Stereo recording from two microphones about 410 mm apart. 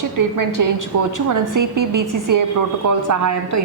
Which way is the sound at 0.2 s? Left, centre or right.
Right.